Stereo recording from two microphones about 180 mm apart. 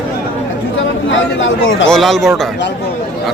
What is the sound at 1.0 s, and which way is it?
Speech, 90° left.